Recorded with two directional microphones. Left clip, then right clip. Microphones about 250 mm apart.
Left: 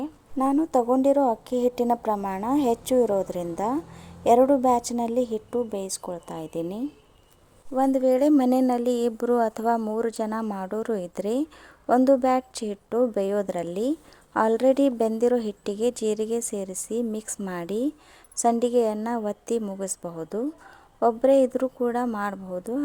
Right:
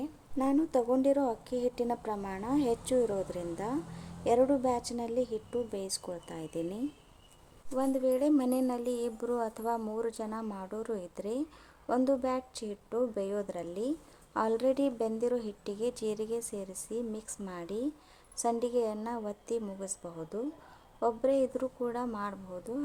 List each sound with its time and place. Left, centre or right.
0.0 s speech: left